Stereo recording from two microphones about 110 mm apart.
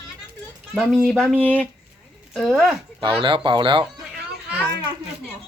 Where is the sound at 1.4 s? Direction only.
15° left (ahead or behind).